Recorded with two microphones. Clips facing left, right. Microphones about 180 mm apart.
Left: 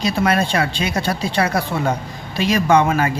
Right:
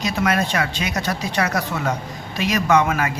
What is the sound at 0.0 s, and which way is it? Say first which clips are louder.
Speech: left 3 dB; 30° left (ahead or behind).